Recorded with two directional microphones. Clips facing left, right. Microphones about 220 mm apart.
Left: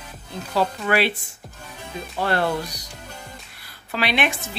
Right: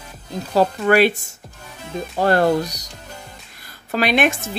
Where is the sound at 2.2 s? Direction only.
40° right (ahead or behind).